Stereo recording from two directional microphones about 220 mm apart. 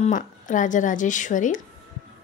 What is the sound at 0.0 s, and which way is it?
Speech, 35° left (ahead or behind).